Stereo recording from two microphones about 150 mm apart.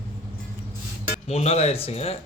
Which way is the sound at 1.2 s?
45° left (ahead or behind).